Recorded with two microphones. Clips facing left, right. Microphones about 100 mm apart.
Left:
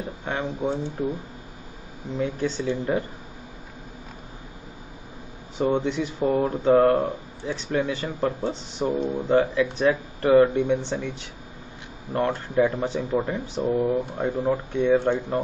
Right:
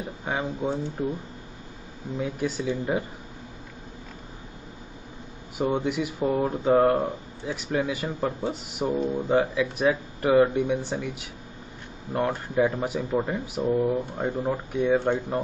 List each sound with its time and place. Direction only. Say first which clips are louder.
0.2 s speech: even; 10° right (ahead or behind)
0.5 s speech: left 1 dB; 15° left (ahead or behind)
2.1 s speech: left 2 dB; 10° right (ahead or behind)
5.6 s speech: left 2 dB; 10° right (ahead or behind)
13.6 s speech: left 1 dB; 5° left (ahead or behind); by 15.4 s 10° right (ahead or behind)